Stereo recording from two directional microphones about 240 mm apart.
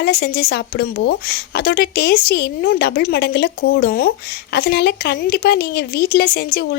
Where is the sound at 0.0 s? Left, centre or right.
Left.